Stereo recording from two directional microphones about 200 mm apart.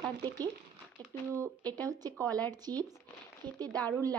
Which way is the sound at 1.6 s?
5° left (ahead or behind).